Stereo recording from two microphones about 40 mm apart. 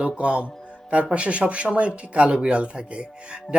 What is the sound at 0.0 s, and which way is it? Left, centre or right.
Speech, right.